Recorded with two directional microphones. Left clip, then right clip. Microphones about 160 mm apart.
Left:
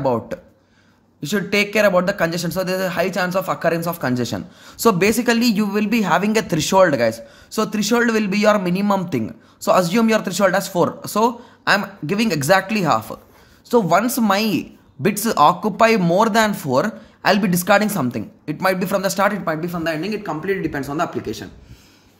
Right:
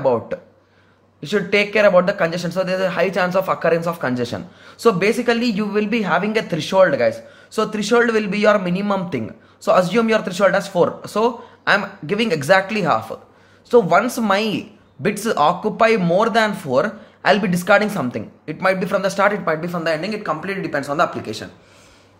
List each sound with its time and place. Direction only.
0.0 s speech: 30° left (ahead or behind); by 21.5 s 15° left (ahead or behind)